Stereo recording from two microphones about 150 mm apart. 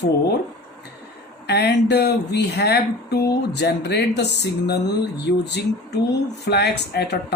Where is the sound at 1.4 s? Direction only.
90° left.